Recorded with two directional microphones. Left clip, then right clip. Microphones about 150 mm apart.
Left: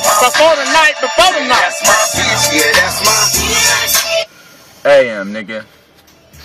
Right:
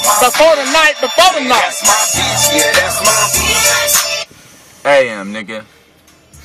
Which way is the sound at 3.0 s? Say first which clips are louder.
Even; 20° left (ahead or behind).